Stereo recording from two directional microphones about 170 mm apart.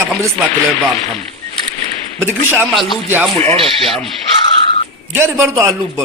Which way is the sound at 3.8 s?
Centre (ahead or behind).